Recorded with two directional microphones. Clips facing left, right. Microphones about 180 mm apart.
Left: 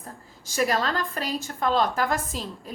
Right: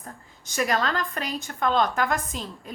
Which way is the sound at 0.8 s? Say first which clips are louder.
Even; centre (ahead or behind).